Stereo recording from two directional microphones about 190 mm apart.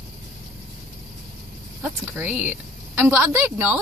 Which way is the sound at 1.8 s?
10° right (ahead or behind).